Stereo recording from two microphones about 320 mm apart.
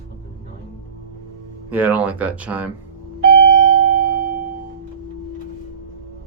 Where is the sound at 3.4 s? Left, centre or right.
Centre.